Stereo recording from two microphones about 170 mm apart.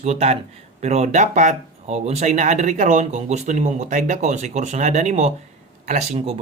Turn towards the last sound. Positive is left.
turn(degrees=-40)  # may be behind; listen again after turning